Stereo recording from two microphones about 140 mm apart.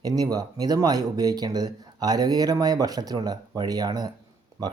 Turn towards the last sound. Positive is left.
turn(degrees=-30)  # may be behind; listen again after turning